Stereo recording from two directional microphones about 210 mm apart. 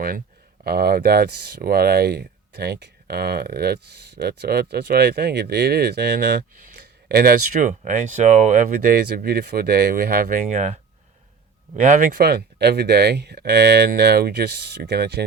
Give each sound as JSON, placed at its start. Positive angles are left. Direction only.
{"t": 0.6, "sound": "speech", "side_deg": -50}
{"t": 11.8, "sound": "speech", "side_deg": -40}